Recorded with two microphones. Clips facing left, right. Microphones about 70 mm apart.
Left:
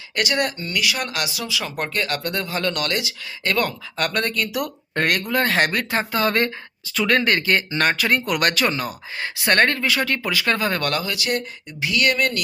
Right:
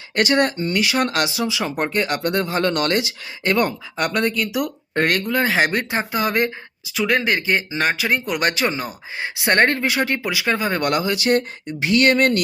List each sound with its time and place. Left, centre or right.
0.2 s speech: right
4.0 s speech: centre
5.7 s speech: centre; by 12.4 s right